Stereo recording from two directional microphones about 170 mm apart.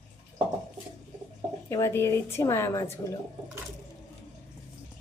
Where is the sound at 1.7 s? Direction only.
15° left (ahead or behind).